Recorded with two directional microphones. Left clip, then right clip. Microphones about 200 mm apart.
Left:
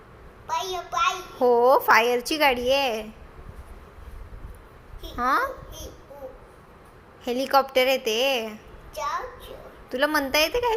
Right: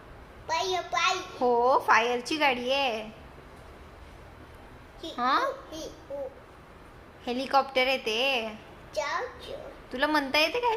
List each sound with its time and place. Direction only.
0.4 s a sound: 15° right (ahead or behind)
1.4 s a woman's voice: 20° left (ahead or behind)
5.1 s a woman's voice: 15° left (ahead or behind)
7.3 s a woman's voice: 20° left (ahead or behind)
9.0 s a child's voice: 15° right (ahead or behind)
9.9 s a woman's voice: 15° left (ahead or behind)